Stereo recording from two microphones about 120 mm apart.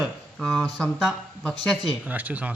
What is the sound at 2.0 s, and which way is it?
Speech, 15° right (ahead or behind).